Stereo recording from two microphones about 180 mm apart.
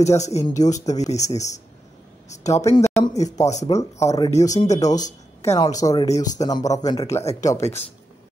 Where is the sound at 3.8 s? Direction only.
15° left (ahead or behind).